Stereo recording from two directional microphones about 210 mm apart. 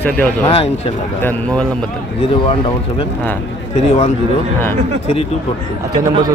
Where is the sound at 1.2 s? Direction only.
5° left (ahead or behind).